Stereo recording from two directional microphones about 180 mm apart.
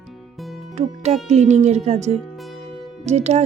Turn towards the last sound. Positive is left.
turn(degrees=-40)  # may be behind; listen again after turning